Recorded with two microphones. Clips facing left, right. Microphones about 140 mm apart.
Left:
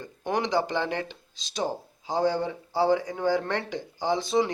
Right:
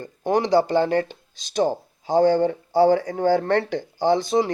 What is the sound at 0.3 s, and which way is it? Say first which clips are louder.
Speech: right 6 dB; 35° right (ahead or behind).